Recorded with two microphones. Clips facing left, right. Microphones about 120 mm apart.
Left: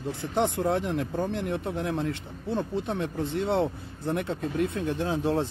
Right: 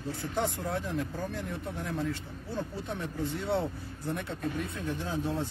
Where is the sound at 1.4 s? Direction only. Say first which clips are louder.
Left 7 dB; 80° left.